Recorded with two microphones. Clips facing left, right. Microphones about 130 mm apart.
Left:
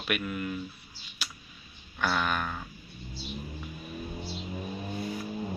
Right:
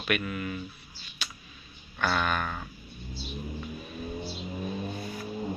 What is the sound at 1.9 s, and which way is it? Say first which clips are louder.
Speech: right 1 dB; 5° left (ahead or behind).